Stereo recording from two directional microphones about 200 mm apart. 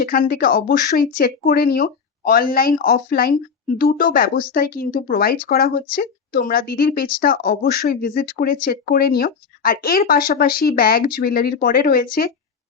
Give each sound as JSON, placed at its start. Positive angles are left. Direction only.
{"t": 0.0, "sound": "speech", "side_deg": 45}